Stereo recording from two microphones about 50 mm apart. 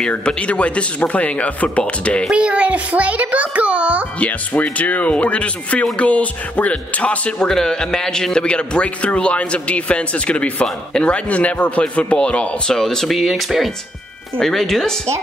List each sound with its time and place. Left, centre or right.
0.2 s a man's voice: left
2.3 s a child's voice: right
4.2 s a man's voice: left
7.4 s a man's voice: centre
12.7 s speech: centre